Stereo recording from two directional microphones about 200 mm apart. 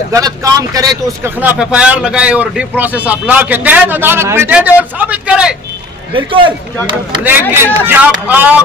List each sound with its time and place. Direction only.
0.1 s speech: 15° right (ahead or behind)
1.2 s speech: 5° right (ahead or behind)
6.1 s speech: 25° right (ahead or behind)
7.2 s speech: 10° right (ahead or behind)